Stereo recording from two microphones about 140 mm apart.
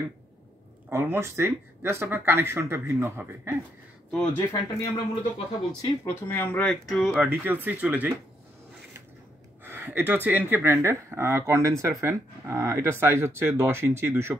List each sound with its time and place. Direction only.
0.8 s speech: 15° right (ahead or behind)
4.1 s speech: 10° left (ahead or behind)
7.2 s speech: 15° right (ahead or behind)
9.7 s speech: 15° right (ahead or behind)